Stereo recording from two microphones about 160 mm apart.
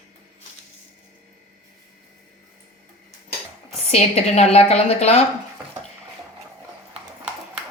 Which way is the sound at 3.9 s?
40° left (ahead or behind).